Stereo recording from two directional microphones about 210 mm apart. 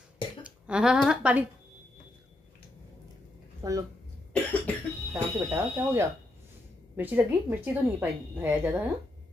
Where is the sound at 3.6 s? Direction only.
15° right (ahead or behind).